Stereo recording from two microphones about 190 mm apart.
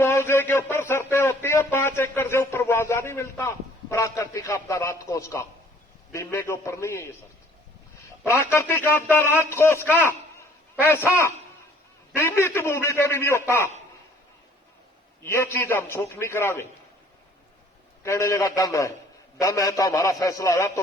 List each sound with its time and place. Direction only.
0.0 s a man's voice: 10° left (ahead or behind)
8.2 s speech: 10° left (ahead or behind)
15.2 s speech: 15° left (ahead or behind)
18.0 s speech: 15° left (ahead or behind)